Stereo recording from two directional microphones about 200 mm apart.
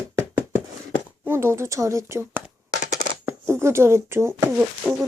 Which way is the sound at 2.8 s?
40° left (ahead or behind).